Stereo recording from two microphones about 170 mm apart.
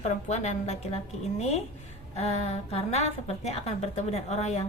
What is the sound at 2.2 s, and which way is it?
A woman's voice, 40° left (ahead or behind).